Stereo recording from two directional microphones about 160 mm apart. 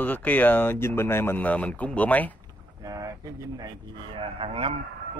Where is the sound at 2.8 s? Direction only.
20° right (ahead or behind).